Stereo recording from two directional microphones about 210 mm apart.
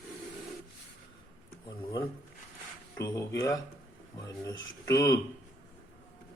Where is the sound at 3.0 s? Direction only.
15° left (ahead or behind).